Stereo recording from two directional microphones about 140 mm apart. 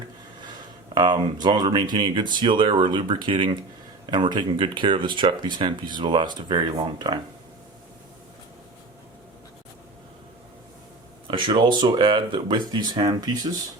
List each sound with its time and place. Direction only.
0.9 s speech: 35° right (ahead or behind)
11.3 s speech: 35° right (ahead or behind)